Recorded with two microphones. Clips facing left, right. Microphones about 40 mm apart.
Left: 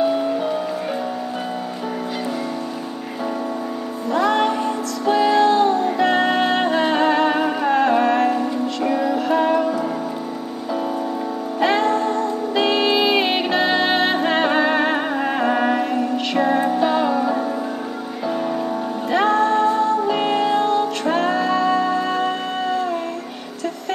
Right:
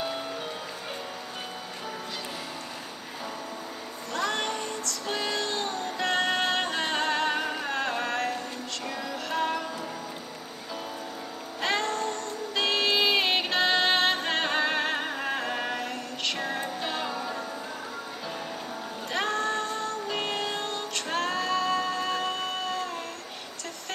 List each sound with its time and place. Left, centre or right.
4.1 s music: centre
7.3 s music: left
8.0 s music: centre
11.6 s music: centre
17.1 s music: left
19.0 s music: centre